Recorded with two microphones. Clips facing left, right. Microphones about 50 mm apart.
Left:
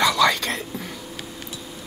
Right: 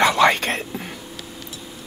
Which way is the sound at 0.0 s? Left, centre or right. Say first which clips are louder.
Right 3 dB; right.